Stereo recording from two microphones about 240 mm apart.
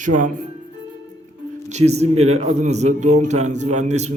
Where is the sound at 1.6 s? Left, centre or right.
Right.